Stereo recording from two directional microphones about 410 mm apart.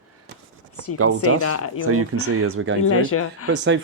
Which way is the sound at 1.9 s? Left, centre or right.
Right.